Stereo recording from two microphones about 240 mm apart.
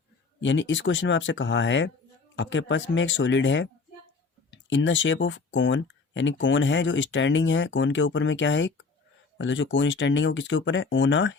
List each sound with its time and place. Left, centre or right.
0.4 s speech: left